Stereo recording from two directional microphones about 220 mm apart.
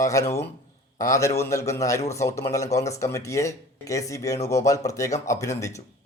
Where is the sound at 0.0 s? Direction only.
15° left (ahead or behind).